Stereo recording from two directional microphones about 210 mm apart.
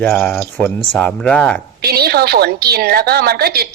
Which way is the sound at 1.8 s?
50° right (ahead or behind).